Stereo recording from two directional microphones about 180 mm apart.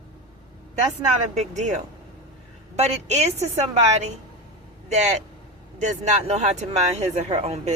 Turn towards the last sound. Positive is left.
turn(degrees=-35)  # may be behind; listen again after turning